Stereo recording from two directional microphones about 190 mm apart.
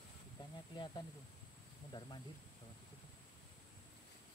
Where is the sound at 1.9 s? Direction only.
25° left (ahead or behind).